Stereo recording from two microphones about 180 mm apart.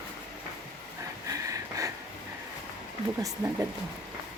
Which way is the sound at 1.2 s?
20° right (ahead or behind).